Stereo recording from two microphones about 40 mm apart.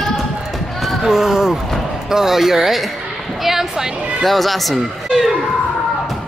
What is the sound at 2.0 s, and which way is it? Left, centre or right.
Speech, centre.